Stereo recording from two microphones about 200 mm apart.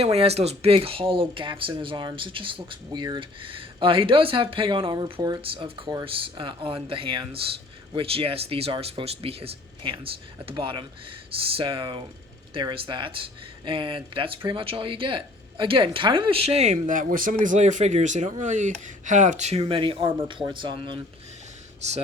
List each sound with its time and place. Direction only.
0.0 s speech: 30° right (ahead or behind)